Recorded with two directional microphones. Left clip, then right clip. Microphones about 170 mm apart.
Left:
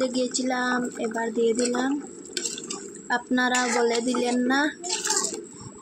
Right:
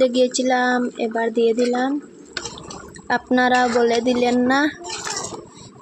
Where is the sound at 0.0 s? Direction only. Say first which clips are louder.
Right 9 dB; 55° right (ahead or behind).